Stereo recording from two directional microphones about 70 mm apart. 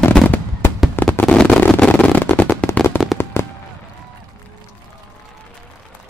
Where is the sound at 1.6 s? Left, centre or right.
Left.